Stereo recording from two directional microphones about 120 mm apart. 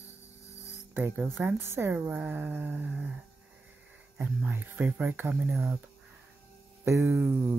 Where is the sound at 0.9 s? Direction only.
20° right (ahead or behind).